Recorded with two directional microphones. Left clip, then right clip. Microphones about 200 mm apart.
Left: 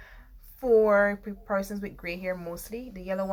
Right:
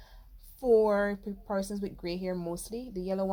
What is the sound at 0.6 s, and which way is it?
A woman's voice, 40° right (ahead or behind).